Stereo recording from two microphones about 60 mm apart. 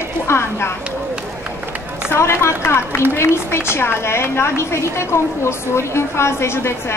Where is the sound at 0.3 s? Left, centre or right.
Left.